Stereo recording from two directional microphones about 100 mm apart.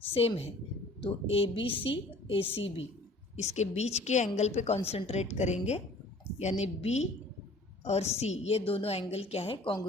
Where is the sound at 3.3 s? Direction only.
90° left.